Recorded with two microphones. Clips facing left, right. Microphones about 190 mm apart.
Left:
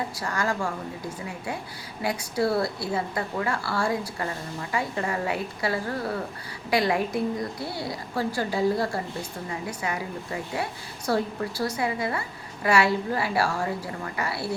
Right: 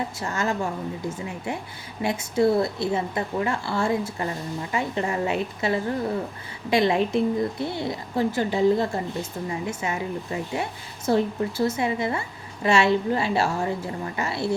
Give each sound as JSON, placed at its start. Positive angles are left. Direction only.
{"t": 0.2, "sound": "a woman's voice", "side_deg": -25}
{"t": 2.0, "sound": "a woman's voice", "side_deg": -25}